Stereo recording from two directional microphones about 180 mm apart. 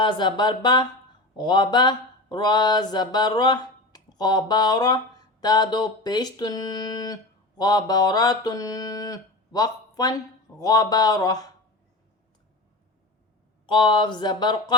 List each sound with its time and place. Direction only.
0.0 s mantra: 25° left (ahead or behind)
13.7 s mantra: 25° left (ahead or behind)